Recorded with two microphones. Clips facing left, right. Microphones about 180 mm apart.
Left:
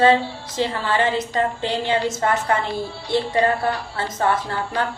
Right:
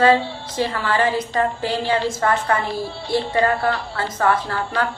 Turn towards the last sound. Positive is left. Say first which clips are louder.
# right 1 dB
turn(degrees=25)  # may be behind; listen again after turning